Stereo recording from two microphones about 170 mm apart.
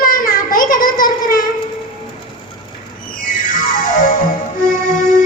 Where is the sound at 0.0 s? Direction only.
55° left (ahead or behind).